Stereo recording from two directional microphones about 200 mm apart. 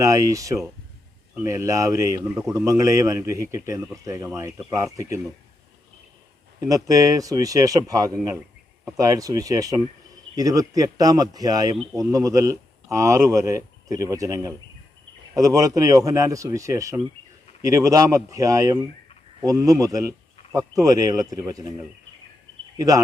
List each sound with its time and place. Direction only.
0.0 s speech: 15° right (ahead or behind)
6.6 s speech: 15° right (ahead or behind)